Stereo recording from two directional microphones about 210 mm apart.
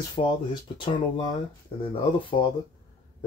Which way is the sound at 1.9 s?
25° left (ahead or behind).